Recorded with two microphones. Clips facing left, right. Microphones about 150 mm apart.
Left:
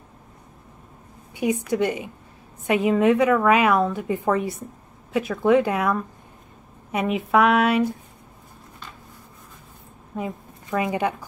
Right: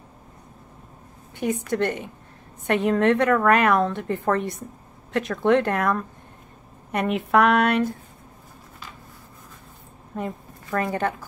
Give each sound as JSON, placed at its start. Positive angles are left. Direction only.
{"t": 1.3, "sound": "a woman's voice", "side_deg": 10}
{"t": 10.1, "sound": "a sound", "side_deg": 5}
{"t": 10.9, "sound": "a woman's voice", "side_deg": 15}